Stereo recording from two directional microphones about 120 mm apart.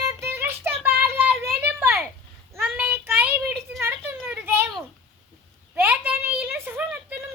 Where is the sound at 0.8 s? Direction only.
15° right (ahead or behind).